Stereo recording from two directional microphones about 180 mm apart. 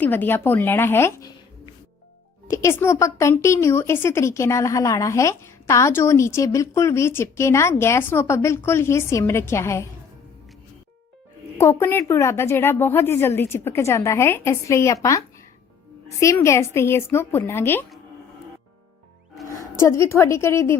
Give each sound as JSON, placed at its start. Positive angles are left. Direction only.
{"t": 0.0, "sound": "a woman's voice", "side_deg": 10}
{"t": 11.5, "sound": "a woman's voice", "side_deg": 15}
{"t": 16.0, "sound": "a woman's voice", "side_deg": 15}
{"t": 19.5, "sound": "a woman's voice", "side_deg": 15}